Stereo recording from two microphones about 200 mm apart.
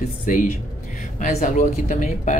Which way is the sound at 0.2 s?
40° left (ahead or behind).